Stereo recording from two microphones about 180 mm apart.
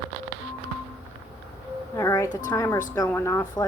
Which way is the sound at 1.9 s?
20° left (ahead or behind).